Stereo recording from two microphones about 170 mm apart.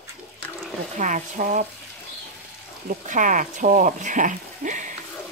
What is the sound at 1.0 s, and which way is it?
Speech, 50° right (ahead or behind).